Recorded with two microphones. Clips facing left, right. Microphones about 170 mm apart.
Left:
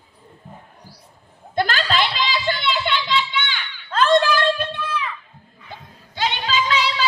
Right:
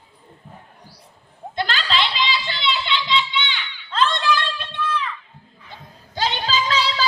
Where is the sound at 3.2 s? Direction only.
50° left (ahead or behind).